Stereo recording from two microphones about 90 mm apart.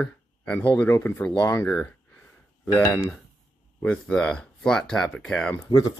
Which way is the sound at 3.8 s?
10° left (ahead or behind).